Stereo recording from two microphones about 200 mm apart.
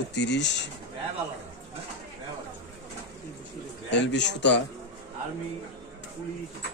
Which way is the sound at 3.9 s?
60° left (ahead or behind).